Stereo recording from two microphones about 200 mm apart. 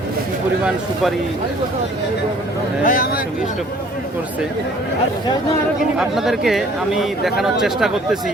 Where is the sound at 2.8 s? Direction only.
45° left (ahead or behind).